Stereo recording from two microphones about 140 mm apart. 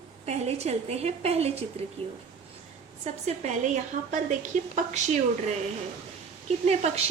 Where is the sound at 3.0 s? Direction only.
55° right (ahead or behind).